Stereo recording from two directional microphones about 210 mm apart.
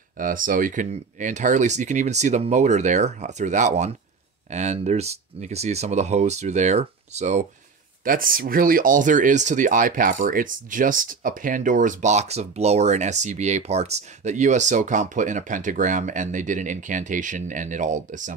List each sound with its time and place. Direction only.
0.2 s speech: 40° right (ahead or behind)